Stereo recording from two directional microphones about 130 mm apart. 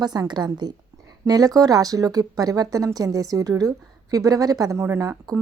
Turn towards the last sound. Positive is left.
turn(degrees=-25)  # may be behind; listen again after turning